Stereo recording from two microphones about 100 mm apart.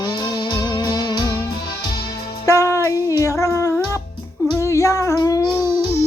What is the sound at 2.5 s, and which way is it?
Music, 30° left (ahead or behind).